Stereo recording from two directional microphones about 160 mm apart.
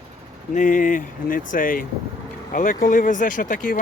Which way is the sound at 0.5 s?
55° left (ahead or behind).